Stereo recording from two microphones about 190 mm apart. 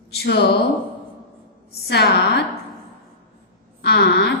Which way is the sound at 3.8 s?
55° left (ahead or behind).